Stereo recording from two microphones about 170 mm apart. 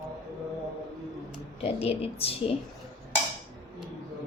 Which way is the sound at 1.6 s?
35° left (ahead or behind).